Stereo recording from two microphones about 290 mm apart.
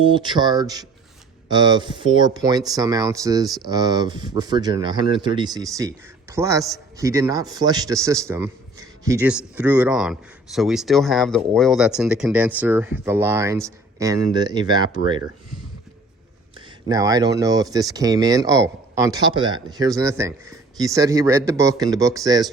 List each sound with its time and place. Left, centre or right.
0.0 s speech: centre
16.6 s speech: centre